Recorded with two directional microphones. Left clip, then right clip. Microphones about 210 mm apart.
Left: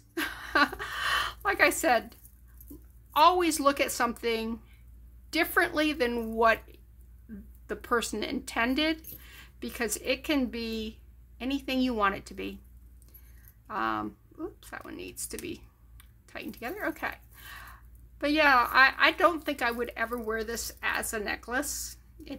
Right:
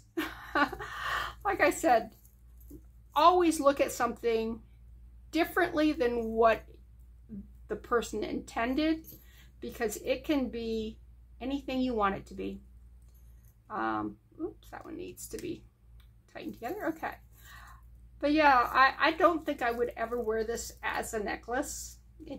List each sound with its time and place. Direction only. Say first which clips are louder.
0.1 s a sound: left 4 dB; 15° left (ahead or behind)
3.1 s speech: left 1 dB; 15° left (ahead or behind)
7.6 s a woman's voice: left 1 dB; 20° left (ahead or behind)
13.7 s speech: left 2 dB; 20° left (ahead or behind)
16.3 s a sound: left 1 dB; 15° left (ahead or behind)
18.2 s a woman's voice: left 1 dB; 15° left (ahead or behind)